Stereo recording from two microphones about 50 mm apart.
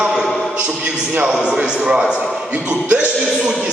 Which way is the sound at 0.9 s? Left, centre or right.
Centre.